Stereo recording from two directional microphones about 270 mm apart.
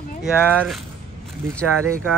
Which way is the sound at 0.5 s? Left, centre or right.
Centre.